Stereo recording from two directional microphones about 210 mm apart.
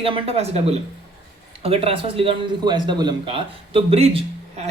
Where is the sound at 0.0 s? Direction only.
25° right (ahead or behind).